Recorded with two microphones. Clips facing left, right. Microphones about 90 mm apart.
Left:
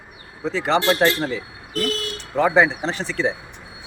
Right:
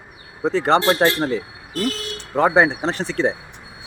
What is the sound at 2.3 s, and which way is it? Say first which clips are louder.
Speech: right 1 dB; 45° right (ahead or behind).